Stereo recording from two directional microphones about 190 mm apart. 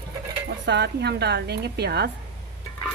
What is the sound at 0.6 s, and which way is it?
Speech, 60° right (ahead or behind).